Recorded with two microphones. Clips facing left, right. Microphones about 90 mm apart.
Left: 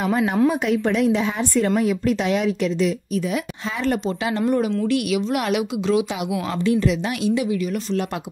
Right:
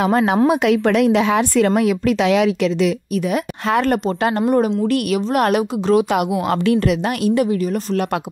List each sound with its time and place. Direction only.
0.0 s a woman's voice: 80° right
3.6 s a woman's voice: 60° right (ahead or behind)
6.6 s a woman's voice: 65° right (ahead or behind)